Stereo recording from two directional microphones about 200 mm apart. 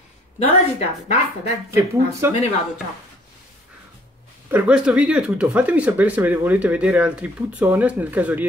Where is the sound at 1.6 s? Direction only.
15° right (ahead or behind).